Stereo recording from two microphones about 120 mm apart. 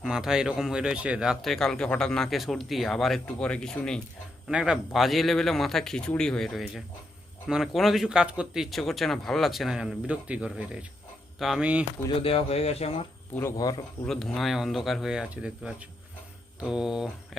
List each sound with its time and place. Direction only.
0.0 s speech: 5° right (ahead or behind)
4.4 s speech: 5° right (ahead or behind)
12.2 s speech: 55° left (ahead or behind)
13.6 s speech: 35° left (ahead or behind)
14.1 s speech: 5° left (ahead or behind)